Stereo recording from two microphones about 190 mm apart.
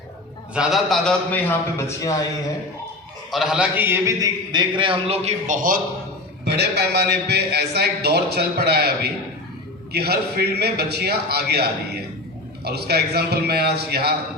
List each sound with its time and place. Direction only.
0.5 s a man's voice: 5° right (ahead or behind)
2.0 s speech: 20° left (ahead or behind)
3.3 s a man's voice: 5° right (ahead or behind); by 5.8 s 45° right (ahead or behind)
6.4 s a man's voice: 60° right (ahead or behind)
9.9 s a man's voice: 55° right (ahead or behind)